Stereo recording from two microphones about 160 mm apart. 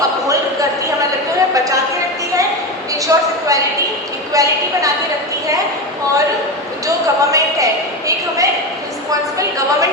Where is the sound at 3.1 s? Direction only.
20° right (ahead or behind).